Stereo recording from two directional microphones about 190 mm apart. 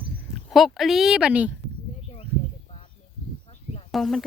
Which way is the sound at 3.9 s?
Centre (ahead or behind).